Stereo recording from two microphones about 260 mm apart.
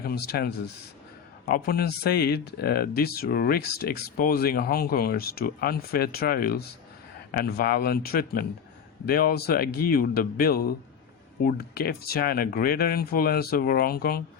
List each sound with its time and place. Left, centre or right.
0.0 s speech: left